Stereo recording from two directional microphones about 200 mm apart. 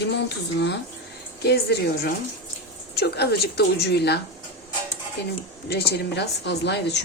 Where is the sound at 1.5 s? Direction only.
55° left (ahead or behind).